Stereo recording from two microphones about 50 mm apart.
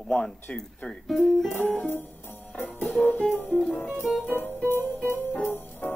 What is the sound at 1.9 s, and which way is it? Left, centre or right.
Music, left.